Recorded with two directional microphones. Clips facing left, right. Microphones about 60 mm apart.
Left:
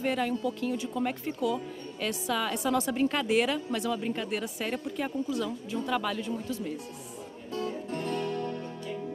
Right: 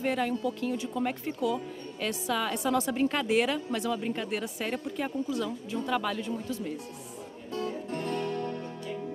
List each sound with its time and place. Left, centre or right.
0.0 s speech: right
7.9 s music: right